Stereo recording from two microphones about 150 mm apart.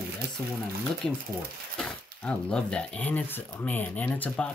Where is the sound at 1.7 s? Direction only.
5° left (ahead or behind).